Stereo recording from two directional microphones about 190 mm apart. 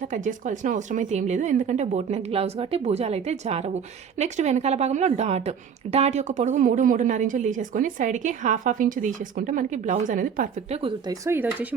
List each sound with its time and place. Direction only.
0.1 s a woman's voice: 40° right (ahead or behind)
11.3 s speech: 10° right (ahead or behind)